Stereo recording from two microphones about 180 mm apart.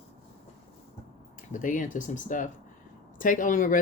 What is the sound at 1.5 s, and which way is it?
Speech, 45° left (ahead or behind).